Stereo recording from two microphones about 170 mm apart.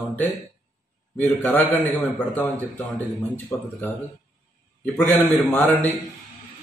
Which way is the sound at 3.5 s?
10° left (ahead or behind).